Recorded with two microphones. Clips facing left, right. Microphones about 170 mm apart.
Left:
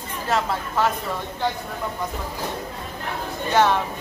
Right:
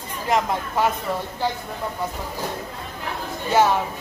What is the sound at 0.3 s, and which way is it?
Speech, 15° right (ahead or behind).